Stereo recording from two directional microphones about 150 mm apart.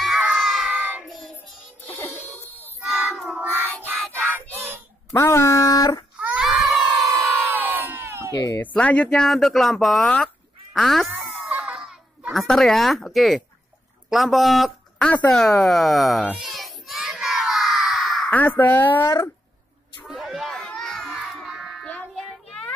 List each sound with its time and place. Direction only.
0.0 s child singing: centre (ahead or behind)
1.9 s music: 15° left (ahead or behind)
2.8 s child singing: centre (ahead or behind)
5.1 s speech: 15° left (ahead or behind)
6.1 s baby cry: 5° right (ahead or behind)
6.9 s crowd: 20° right (ahead or behind)
8.3 s speech: 25° left (ahead or behind)
8.5 s speech: 10° left (ahead or behind)
11.3 s a sound: 5° right (ahead or behind)
18.3 s a woman's voice: 10° left (ahead or behind)
20.1 s a sound: centre (ahead or behind)
21.8 s child singing: 10° left (ahead or behind)